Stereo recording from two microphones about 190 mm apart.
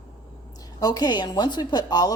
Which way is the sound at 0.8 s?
20° left (ahead or behind).